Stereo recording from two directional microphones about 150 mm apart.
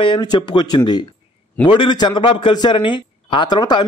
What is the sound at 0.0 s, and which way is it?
A man's voice, 30° left (ahead or behind).